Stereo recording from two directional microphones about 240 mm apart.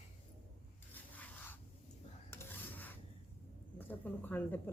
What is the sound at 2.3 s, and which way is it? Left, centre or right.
Rub, centre.